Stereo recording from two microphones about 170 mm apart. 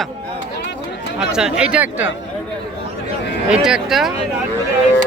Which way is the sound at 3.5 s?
5° right (ahead or behind).